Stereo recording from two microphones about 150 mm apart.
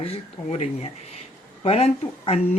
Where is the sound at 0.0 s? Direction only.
40° left (ahead or behind).